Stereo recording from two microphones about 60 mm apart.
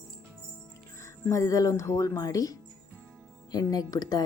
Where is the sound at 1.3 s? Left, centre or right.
Left.